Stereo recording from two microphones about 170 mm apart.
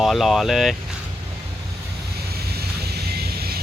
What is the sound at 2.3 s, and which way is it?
Vehicle, 70° right (ahead or behind).